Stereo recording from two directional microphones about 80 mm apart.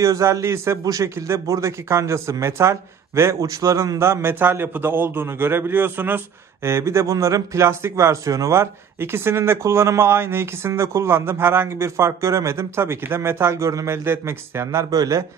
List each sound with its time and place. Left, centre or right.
0.0 s a man's voice: right
14.9 s a man's voice: right